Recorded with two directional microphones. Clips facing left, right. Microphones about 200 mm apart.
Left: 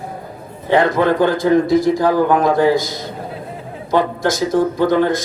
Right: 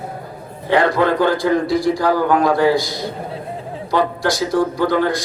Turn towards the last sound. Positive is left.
turn(degrees=20)  # may be behind; listen again after turning